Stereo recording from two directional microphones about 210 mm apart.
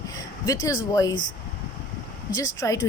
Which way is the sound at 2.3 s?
20° left (ahead or behind).